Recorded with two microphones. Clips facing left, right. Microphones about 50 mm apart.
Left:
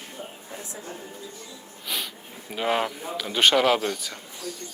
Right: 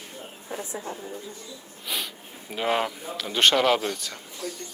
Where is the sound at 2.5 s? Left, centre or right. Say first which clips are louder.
Even; centre.